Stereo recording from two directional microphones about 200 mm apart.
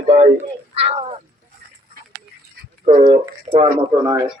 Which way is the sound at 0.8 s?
30° right (ahead or behind).